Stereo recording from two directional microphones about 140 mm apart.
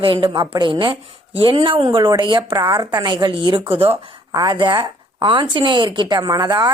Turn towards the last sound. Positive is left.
turn(degrees=-30)  # may be behind; listen again after turning